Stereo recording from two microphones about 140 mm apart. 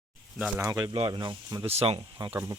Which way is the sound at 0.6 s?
20° right (ahead or behind).